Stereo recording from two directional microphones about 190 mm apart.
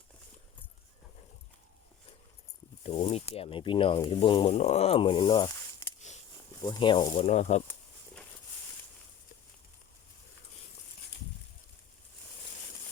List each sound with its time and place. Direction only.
2.8 s speech: 35° left (ahead or behind)